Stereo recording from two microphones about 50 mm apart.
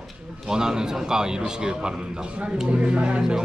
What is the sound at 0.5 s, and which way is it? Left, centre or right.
A man's voice, centre.